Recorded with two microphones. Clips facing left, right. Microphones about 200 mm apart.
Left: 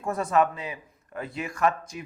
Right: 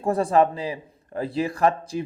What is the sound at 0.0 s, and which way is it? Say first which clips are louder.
A man's voice: right 5 dB; 30° right (ahead or behind).